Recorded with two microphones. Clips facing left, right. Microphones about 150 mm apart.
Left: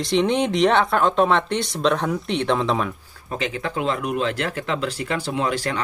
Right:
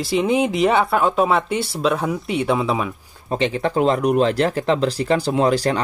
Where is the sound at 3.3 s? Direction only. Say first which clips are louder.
Right 6 dB; 30° right (ahead or behind).